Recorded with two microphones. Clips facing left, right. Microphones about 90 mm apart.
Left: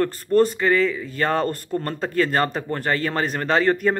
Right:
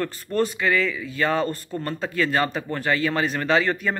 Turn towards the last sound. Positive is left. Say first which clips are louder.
# left 3 dB
turn(degrees=40)  # may be behind; listen again after turning